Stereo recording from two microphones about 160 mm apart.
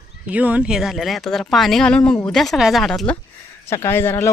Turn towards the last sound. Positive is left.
turn(degrees=15)  # may be behind; listen again after turning